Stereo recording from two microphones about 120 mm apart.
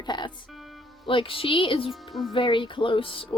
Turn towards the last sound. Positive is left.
turn(degrees=45)  # may be behind; listen again after turning